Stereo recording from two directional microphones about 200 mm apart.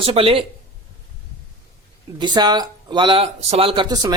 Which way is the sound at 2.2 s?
20° right (ahead or behind).